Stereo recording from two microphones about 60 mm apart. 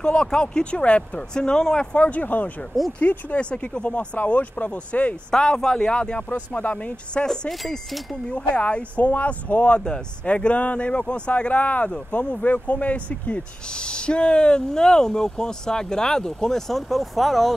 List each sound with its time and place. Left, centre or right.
0.0 s speech: centre
5.3 s speech: centre
7.2 s speech: centre
8.3 s speech: centre